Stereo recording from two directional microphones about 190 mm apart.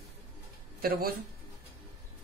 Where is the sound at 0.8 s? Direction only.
50° right (ahead or behind).